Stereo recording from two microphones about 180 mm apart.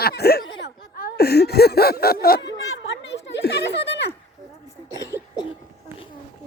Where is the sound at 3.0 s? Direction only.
65° left (ahead or behind).